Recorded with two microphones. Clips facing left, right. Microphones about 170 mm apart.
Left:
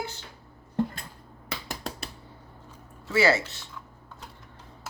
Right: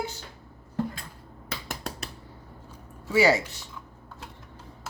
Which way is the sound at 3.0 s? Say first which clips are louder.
Right 2 dB; 15° right (ahead or behind).